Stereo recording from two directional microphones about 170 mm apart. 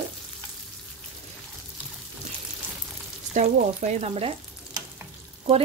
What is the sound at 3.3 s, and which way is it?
Speech, 45° right (ahead or behind).